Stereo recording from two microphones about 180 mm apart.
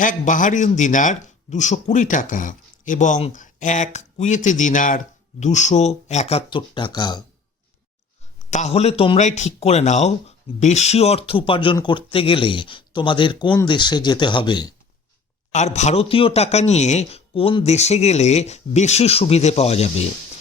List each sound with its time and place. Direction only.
0.0 s speech: 45° left (ahead or behind); by 7.2 s 25° left (ahead or behind)
8.4 s speech: 40° left (ahead or behind); by 14.7 s 25° left (ahead or behind)
15.5 s speech: 40° left (ahead or behind)